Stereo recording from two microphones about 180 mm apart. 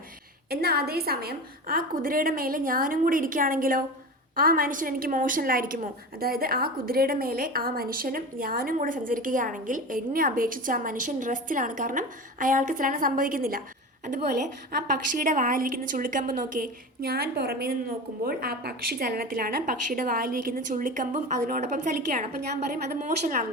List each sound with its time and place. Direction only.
0.5 s a woman's voice: 60° right (ahead or behind)
14.9 s a woman's voice: 50° right (ahead or behind)